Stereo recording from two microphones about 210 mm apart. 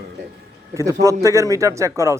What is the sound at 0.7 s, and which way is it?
Speech, 15° right (ahead or behind).